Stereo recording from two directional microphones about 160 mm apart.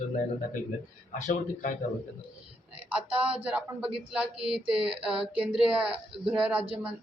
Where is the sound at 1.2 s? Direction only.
50° left (ahead or behind).